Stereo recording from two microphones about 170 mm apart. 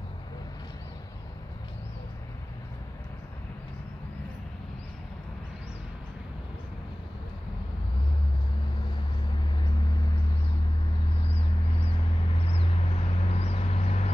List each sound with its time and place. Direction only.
12.4 s vehicle: 35° left (ahead or behind)